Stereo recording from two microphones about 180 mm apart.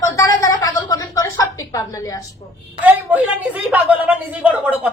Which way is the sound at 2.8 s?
10° right (ahead or behind).